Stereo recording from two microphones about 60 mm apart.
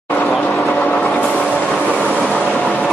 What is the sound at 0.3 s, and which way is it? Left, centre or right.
Vehicle, centre.